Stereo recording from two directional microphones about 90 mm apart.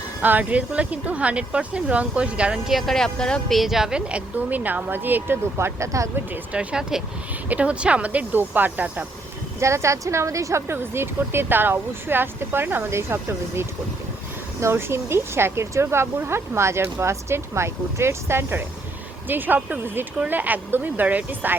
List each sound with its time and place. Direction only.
0.2 s speech: 20° right (ahead or behind); by 6.1 s 35° right (ahead or behind)
6.3 s speech: 15° right (ahead or behind)
9.6 s speech: 30° right (ahead or behind)
14.6 s speech: 25° right (ahead or behind)